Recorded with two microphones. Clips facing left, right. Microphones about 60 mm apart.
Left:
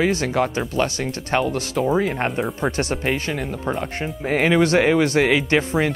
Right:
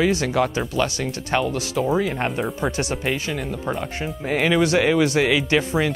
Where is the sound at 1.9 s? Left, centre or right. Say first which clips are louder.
Left 1 dB; left.